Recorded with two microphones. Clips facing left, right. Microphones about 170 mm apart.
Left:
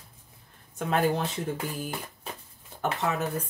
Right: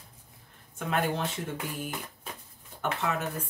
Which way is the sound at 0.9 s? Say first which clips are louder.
Left 3 dB; 35° left (ahead or behind).